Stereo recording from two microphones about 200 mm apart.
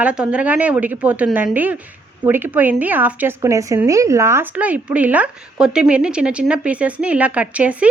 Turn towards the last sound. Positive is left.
turn(degrees=-5)  # may be behind; listen again after turning